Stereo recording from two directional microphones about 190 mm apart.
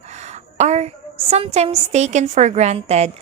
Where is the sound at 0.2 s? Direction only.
35° right (ahead or behind).